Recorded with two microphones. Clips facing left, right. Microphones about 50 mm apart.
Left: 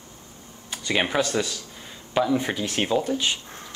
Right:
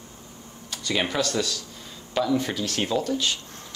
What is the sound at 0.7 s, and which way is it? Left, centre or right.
Speech, left.